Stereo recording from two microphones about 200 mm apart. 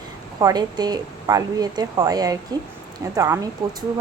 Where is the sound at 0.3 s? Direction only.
20° right (ahead or behind).